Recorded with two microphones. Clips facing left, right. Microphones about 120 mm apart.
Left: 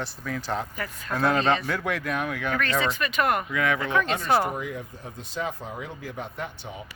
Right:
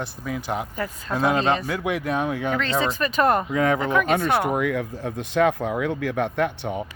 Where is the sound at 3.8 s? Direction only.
10° right (ahead or behind).